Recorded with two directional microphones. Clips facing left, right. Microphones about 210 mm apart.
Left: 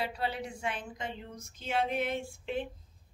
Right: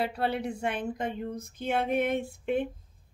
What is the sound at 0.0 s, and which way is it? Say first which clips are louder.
Speech: right 5 dB; 55° right (ahead or behind).